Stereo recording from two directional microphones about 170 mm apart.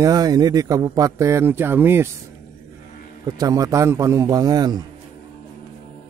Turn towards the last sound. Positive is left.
turn(degrees=-25)  # may be behind; listen again after turning